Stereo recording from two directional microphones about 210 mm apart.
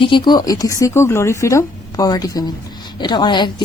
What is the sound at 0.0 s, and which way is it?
A woman's voice, 20° left (ahead or behind).